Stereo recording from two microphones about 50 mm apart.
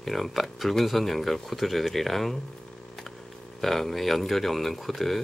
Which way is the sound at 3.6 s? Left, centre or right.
Centre.